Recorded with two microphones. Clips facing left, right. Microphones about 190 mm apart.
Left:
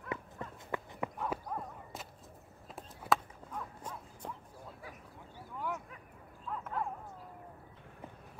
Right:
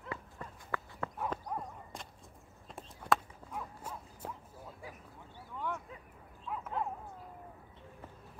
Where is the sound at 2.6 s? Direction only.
Centre (ahead or behind).